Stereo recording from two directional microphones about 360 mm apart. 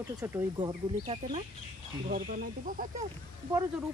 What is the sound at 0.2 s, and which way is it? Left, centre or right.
Speech, centre.